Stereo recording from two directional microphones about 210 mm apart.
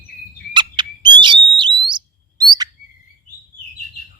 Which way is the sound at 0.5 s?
20° right (ahead or behind).